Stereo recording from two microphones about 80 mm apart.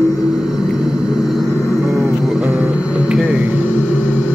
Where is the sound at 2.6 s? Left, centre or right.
Centre.